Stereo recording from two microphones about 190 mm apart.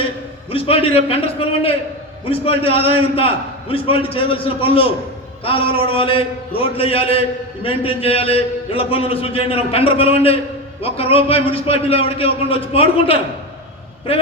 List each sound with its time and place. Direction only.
0.5 s a man's voice: 30° left (ahead or behind)